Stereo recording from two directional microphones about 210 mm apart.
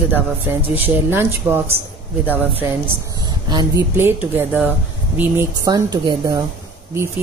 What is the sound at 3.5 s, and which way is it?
A woman's voice, 20° right (ahead or behind).